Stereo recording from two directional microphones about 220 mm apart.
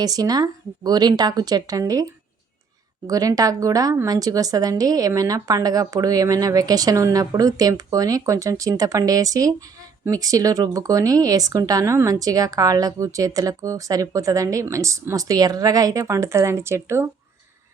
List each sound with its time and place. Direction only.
0.0 s speech: 15° right (ahead or behind)
3.1 s speech: 15° right (ahead or behind)